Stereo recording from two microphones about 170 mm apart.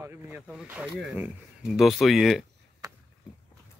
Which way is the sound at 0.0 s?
15° right (ahead or behind).